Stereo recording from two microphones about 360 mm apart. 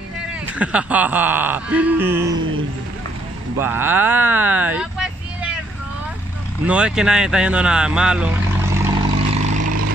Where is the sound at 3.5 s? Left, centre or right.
Centre.